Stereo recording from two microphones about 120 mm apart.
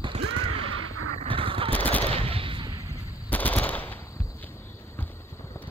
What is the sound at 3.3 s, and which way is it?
Machine gun, 15° left (ahead or behind).